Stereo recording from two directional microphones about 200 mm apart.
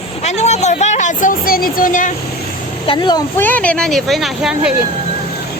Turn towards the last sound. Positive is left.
turn(degrees=-5)  # may be behind; listen again after turning